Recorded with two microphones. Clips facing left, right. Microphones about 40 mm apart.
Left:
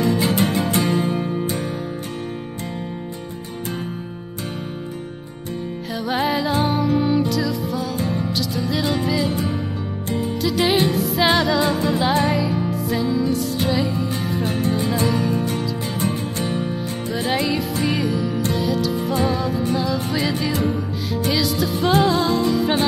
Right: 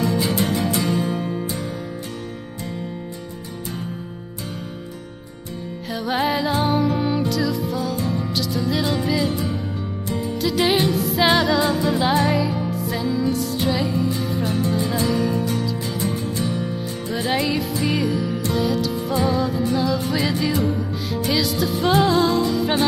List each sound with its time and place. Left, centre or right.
0.0 s music: left
5.9 s music: centre
10.4 s music: centre
14.4 s music: left
17.1 s music: centre